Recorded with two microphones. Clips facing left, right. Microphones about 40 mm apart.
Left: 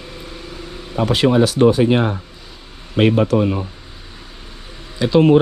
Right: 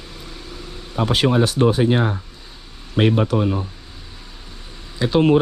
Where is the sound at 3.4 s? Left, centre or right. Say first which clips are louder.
Left 3 dB; left.